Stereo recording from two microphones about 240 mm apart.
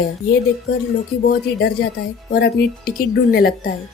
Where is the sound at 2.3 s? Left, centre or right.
Left.